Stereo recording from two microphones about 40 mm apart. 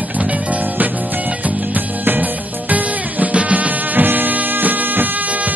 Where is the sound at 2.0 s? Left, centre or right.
Right.